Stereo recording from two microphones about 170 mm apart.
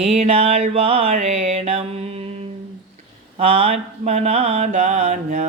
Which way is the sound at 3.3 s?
35° right (ahead or behind).